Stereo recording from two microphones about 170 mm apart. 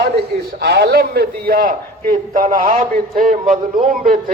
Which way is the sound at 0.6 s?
75° right (ahead or behind).